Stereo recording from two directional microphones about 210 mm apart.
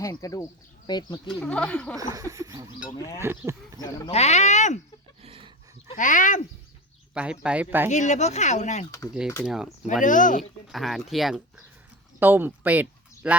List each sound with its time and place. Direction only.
0.0 s speech: 15° left (ahead or behind)
1.3 s speech: 5° left (ahead or behind)
2.0 s snicker: 15° right (ahead or behind)
4.1 s speech: 30° left (ahead or behind)
5.2 s a sound: 25° right (ahead or behind)
5.9 s speech: 40° left (ahead or behind)
7.1 s speech: 5° right (ahead or behind)
7.9 s speech: 35° left (ahead or behind)
8.9 s speech: 15° left (ahead or behind)
9.4 s speech: centre (ahead or behind)
10.0 s speech: 40° left (ahead or behind)
10.7 s speech: centre (ahead or behind)